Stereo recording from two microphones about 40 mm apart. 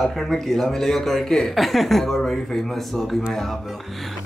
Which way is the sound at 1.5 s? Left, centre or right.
Centre.